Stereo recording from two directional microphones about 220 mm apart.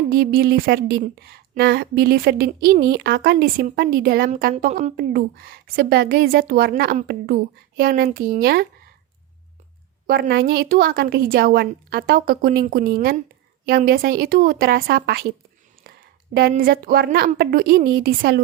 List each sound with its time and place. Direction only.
0.1 s a woman's voice: 45° right (ahead or behind)
4.9 s a woman's voice: 45° right (ahead or behind)
10.1 s a woman's voice: 45° right (ahead or behind)